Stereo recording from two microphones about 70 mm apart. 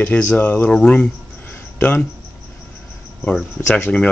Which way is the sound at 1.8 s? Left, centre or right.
Left.